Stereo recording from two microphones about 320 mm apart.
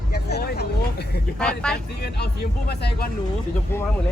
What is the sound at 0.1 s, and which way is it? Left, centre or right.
Vehicle, left.